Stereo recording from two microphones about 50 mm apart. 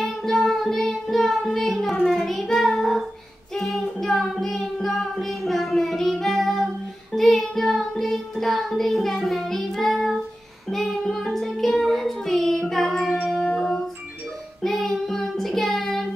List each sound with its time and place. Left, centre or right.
0.0 s music: centre
2.0 s child singing: centre
10.7 s music: centre
14.6 s child singing: centre